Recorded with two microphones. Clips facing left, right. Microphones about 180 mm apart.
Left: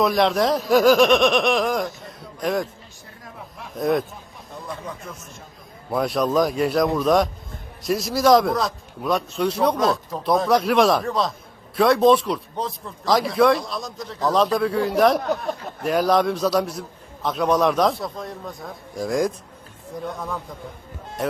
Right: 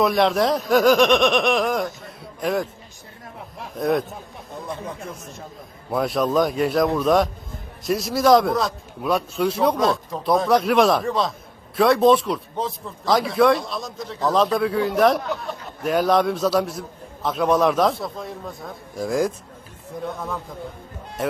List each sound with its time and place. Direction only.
0.0 s speech: centre (ahead or behind)
3.8 s speech: centre (ahead or behind)
5.9 s speech: centre (ahead or behind)
15.2 s speech: 40° left (ahead or behind)
15.8 s speech: centre (ahead or behind)